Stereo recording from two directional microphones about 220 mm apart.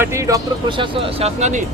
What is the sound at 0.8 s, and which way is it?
Speech, 25° right (ahead or behind).